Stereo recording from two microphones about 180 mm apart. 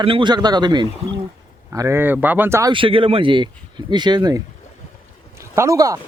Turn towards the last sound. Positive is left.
turn(degrees=-20)  # may be behind; listen again after turning